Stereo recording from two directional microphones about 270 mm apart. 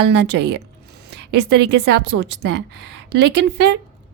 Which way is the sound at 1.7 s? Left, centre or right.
Right.